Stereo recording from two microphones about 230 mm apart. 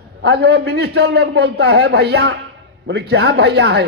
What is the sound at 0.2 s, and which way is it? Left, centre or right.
A man's voice, right.